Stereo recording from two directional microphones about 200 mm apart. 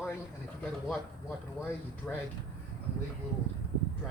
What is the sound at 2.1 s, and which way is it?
Speech, 5° left (ahead or behind).